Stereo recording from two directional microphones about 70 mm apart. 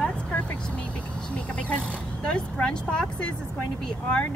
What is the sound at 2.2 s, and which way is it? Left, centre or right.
Speech, centre.